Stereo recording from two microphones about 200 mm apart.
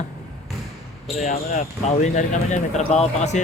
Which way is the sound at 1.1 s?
30° left (ahead or behind).